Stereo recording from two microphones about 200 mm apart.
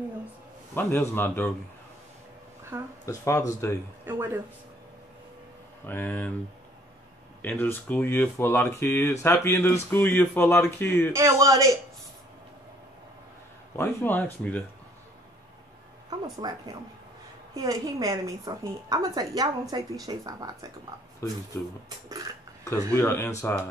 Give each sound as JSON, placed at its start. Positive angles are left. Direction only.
{"t": 0.7, "sound": "speech", "side_deg": 10}
{"t": 2.7, "sound": "a woman's voice", "side_deg": -10}
{"t": 3.1, "sound": "speech", "side_deg": 15}
{"t": 4.0, "sound": "speech", "side_deg": -10}
{"t": 5.9, "sound": "speech", "side_deg": 10}
{"t": 7.4, "sound": "speech", "side_deg": 10}
{"t": 11.1, "sound": "a woman's voice", "side_deg": -15}
{"t": 13.7, "sound": "speech", "side_deg": 10}
{"t": 16.1, "sound": "a woman's voice", "side_deg": -20}
{"t": 22.7, "sound": "speech", "side_deg": 10}